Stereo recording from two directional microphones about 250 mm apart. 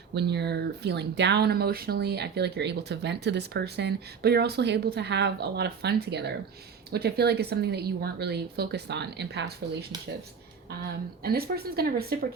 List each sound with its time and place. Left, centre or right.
0.1 s speech: right
10.8 s speech: right